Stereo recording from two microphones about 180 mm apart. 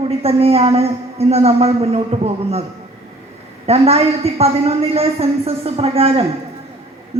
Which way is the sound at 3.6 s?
35° right (ahead or behind).